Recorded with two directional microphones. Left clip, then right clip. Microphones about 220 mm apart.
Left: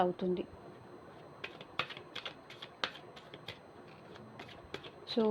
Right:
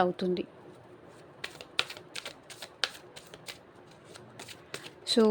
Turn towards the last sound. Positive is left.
turn(degrees=-40)  # may be behind; listen again after turning